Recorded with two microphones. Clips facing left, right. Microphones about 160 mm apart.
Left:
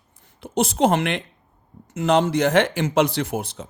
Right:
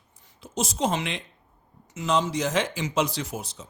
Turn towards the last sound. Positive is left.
turn(degrees=60)  # may be behind; listen again after turning